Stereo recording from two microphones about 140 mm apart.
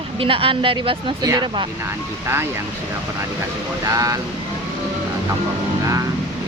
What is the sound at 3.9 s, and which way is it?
Speech, 25° right (ahead or behind).